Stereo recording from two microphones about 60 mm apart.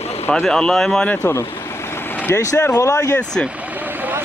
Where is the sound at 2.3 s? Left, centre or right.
Left.